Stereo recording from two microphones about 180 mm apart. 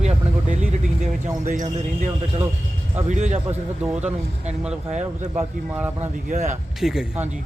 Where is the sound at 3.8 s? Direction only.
5° right (ahead or behind).